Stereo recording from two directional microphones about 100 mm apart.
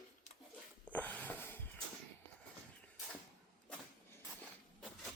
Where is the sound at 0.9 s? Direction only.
15° left (ahead or behind).